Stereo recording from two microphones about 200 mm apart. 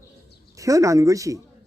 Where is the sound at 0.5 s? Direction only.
15° right (ahead or behind).